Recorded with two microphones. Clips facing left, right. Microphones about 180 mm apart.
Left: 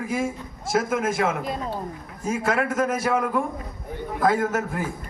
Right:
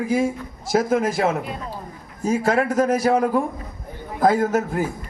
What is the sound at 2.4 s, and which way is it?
A man's voice, 30° right (ahead or behind).